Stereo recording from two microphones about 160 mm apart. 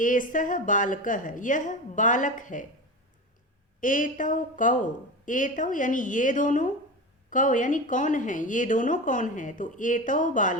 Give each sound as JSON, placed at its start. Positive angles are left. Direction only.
{"t": 0.0, "sound": "a woman's voice", "side_deg": 55}
{"t": 3.8, "sound": "a woman's voice", "side_deg": 55}